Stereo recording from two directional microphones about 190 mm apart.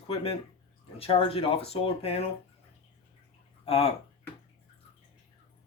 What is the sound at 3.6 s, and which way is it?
Speech, 30° left (ahead or behind).